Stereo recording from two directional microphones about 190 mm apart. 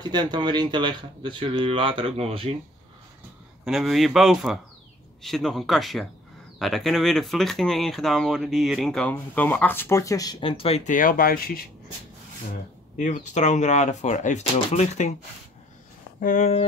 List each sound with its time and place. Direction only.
0.0 s speech: 20° right (ahead or behind)
3.6 s speech: centre (ahead or behind); by 11.6 s 50° left (ahead or behind)
12.9 s speech: 40° left (ahead or behind)
16.2 s speech: 40° left (ahead or behind)